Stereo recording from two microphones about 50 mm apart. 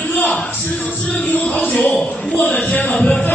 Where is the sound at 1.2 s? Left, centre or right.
Left.